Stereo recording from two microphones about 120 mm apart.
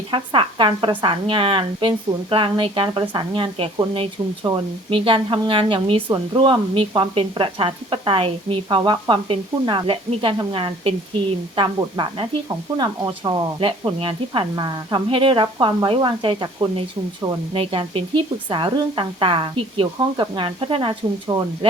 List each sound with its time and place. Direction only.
0.1 s speech: 45° right (ahead or behind)
14.5 s speech: 35° right (ahead or behind); by 20.9 s 50° right (ahead or behind)
21.3 s speech: 30° right (ahead or behind)